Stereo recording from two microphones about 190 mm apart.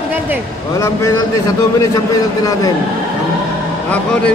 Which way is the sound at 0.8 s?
15° left (ahead or behind).